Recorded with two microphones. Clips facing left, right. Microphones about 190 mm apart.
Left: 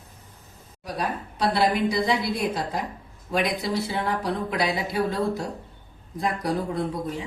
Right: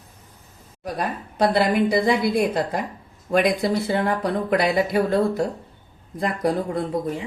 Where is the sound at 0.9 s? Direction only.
50° right (ahead or behind).